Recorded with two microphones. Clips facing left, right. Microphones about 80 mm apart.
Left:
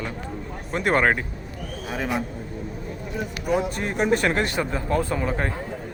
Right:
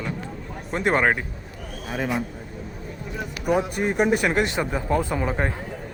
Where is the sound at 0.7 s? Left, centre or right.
Right.